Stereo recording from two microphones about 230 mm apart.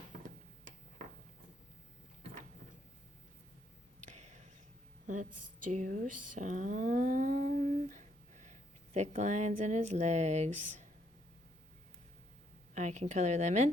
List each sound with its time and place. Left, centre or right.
4.0 s a sound: right
5.6 s speech: right
6.4 s humming: right
8.4 s speech: right
12.7 s a woman's voice: right